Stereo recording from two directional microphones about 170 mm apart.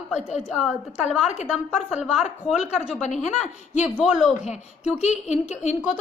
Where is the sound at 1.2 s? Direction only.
40° left (ahead or behind).